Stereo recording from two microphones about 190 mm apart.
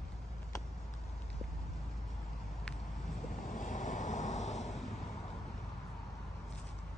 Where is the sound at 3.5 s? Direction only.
40° left (ahead or behind).